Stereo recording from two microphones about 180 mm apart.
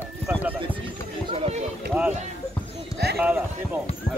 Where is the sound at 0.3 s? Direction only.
10° right (ahead or behind).